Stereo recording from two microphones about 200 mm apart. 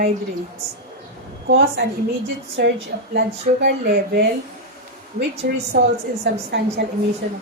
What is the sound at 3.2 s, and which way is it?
A woman's voice, 55° right (ahead or behind).